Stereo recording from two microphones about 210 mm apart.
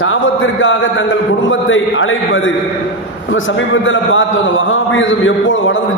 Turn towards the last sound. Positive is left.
turn(degrees=65)  # may be behind; listen again after turning